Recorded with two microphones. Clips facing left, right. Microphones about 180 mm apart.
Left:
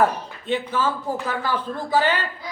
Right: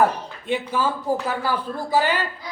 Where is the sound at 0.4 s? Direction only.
10° right (ahead or behind).